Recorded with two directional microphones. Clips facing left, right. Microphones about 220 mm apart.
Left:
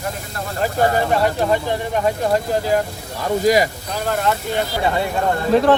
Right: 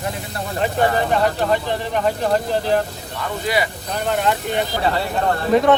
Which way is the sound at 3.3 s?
40° left (ahead or behind).